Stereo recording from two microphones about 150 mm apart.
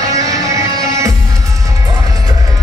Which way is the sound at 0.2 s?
25° right (ahead or behind).